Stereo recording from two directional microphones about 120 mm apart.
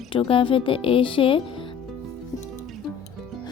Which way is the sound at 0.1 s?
45° left (ahead or behind).